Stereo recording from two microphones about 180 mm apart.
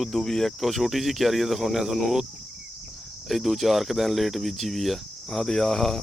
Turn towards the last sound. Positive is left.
turn(degrees=0)  # may be behind; listen again after turning